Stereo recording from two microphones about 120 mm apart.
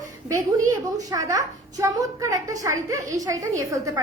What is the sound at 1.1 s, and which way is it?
A woman's voice, 30° right (ahead or behind).